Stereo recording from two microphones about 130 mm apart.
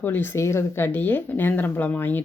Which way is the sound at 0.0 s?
15° left (ahead or behind).